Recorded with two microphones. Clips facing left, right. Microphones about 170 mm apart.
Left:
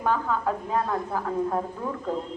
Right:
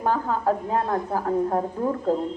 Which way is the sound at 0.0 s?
35° right (ahead or behind).